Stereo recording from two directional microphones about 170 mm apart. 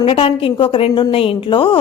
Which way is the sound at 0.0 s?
35° left (ahead or behind).